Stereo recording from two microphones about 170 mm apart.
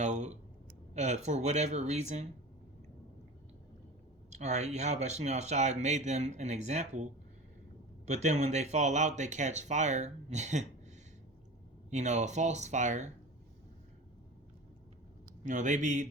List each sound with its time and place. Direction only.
0.0 s a sound: 45° right (ahead or behind)
0.9 s speech: 40° right (ahead or behind)
4.3 s speech: 45° right (ahead or behind)
11.9 s speech: 45° right (ahead or behind)
15.4 s speech: 45° right (ahead or behind)